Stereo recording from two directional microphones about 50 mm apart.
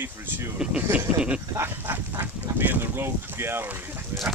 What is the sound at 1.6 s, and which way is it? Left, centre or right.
Speech, right.